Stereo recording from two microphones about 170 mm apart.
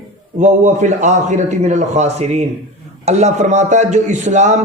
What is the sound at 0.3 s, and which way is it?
A man's voice, 45° right (ahead or behind).